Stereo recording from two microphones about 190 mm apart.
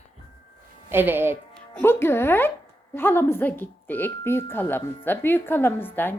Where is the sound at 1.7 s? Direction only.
10° left (ahead or behind).